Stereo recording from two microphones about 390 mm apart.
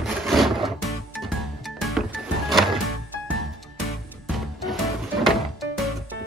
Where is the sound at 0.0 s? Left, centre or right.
Centre.